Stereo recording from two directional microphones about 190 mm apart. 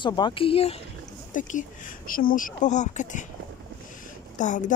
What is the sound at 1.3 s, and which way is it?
Speech, 40° left (ahead or behind).